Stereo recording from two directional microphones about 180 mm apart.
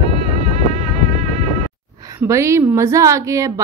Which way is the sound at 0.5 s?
35° right (ahead or behind).